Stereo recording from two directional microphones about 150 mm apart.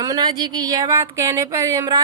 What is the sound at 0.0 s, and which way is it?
Speech, 25° right (ahead or behind).